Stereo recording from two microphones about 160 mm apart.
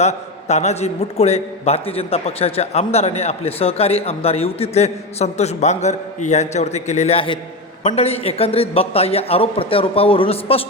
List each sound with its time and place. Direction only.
0.0 s a man's voice: 45° left (ahead or behind)